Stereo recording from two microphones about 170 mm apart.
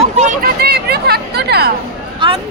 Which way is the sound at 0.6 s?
70° right (ahead or behind).